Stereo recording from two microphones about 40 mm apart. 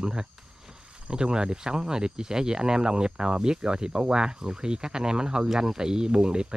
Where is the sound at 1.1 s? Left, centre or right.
Right.